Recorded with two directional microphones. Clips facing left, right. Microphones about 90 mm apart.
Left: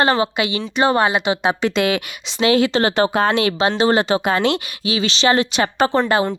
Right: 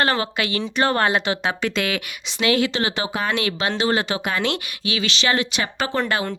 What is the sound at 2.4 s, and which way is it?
Speech, 30° left (ahead or behind).